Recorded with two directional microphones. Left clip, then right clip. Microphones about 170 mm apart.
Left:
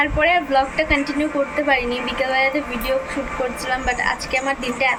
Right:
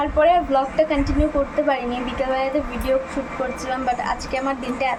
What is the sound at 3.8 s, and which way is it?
A woman's voice, 15° right (ahead or behind).